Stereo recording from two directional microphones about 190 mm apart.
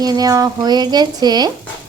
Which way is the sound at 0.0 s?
20° right (ahead or behind).